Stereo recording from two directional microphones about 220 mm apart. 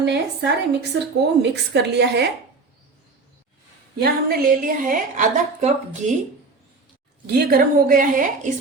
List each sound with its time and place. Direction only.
0.0 s a woman's voice: 50° right (ahead or behind)
4.0 s a woman's voice: 45° right (ahead or behind)
7.3 s a woman's voice: 45° right (ahead or behind)